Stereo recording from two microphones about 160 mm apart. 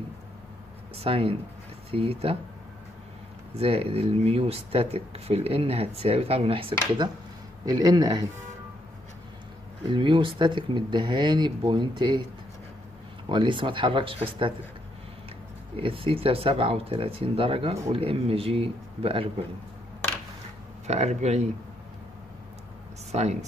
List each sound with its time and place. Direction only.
0.9 s speech: 35° right (ahead or behind)
3.5 s speech: 40° right (ahead or behind)
7.6 s speech: 25° right (ahead or behind)
9.8 s speech: 30° right (ahead or behind)
13.3 s speech: 30° right (ahead or behind)
15.7 s speech: 35° right (ahead or behind)
20.8 s speech: 45° right (ahead or behind)
23.1 s speech: 40° right (ahead or behind)